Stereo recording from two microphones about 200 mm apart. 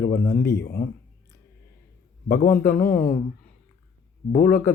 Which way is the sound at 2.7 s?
50° left (ahead or behind).